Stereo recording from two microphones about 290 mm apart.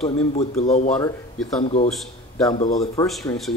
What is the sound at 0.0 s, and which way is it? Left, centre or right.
Speech, left.